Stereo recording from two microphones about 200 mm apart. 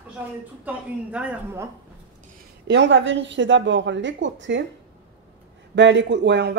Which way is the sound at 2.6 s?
60° right (ahead or behind).